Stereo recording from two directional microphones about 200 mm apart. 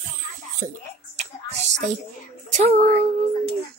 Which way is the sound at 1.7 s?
35° right (ahead or behind).